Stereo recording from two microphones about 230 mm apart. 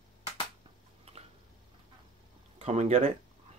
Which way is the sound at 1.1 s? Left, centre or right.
Right.